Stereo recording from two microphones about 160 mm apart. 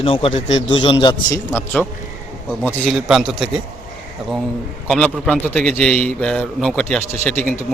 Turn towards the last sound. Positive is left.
turn(degrees=10)  # may be behind; listen again after turning